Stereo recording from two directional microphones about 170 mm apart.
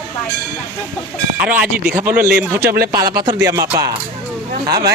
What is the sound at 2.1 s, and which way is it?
Speech, 60° right (ahead or behind).